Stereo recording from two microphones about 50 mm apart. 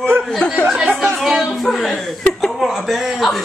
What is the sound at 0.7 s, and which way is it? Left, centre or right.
Chatter, centre.